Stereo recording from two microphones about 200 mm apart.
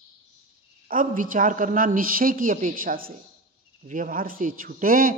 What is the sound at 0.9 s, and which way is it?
A woman's voice, 45° right (ahead or behind).